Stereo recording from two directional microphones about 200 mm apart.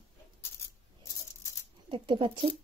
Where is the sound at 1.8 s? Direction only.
25° right (ahead or behind).